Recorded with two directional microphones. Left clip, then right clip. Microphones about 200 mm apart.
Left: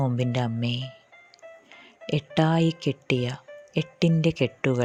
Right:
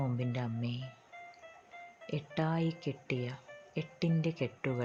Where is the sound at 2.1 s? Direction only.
45° left (ahead or behind).